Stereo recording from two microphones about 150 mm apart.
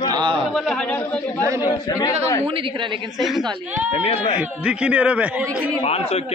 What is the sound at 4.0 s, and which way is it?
Speech, 45° left (ahead or behind).